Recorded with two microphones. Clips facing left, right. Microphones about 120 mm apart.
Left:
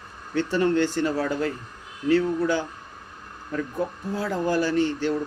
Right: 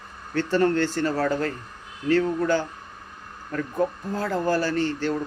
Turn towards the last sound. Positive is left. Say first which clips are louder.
# left 1 dB
turn(degrees=15)  # may be behind; listen again after turning